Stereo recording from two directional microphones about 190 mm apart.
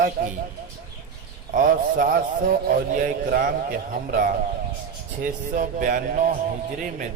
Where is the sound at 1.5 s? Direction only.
45° right (ahead or behind).